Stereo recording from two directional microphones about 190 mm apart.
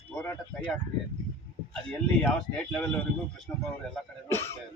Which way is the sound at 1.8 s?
5° left (ahead or behind).